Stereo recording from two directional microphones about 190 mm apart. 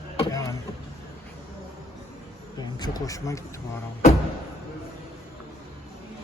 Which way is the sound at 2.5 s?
20° left (ahead or behind).